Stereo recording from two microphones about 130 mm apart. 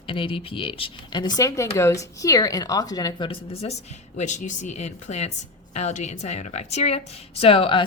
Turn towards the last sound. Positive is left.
turn(degrees=45)  # may be behind; listen again after turning